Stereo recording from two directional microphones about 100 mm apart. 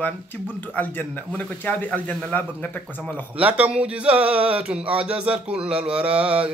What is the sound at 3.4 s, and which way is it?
Speech, 15° right (ahead or behind).